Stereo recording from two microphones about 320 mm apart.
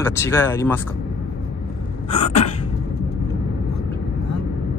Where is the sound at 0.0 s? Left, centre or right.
Centre.